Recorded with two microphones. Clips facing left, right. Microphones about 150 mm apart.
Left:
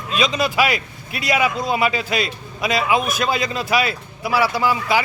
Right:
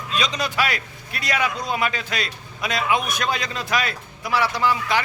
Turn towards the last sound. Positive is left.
turn(degrees=10)  # may be behind; listen again after turning